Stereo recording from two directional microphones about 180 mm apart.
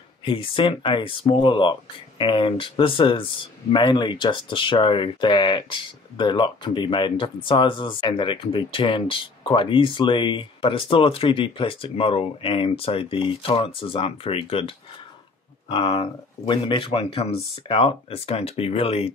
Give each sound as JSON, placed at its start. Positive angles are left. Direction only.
{"t": 0.2, "sound": "speech", "side_deg": 30}
{"t": 15.7, "sound": "speech", "side_deg": 25}